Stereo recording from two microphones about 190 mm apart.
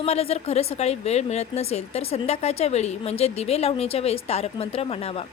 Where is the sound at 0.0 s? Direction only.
30° left (ahead or behind).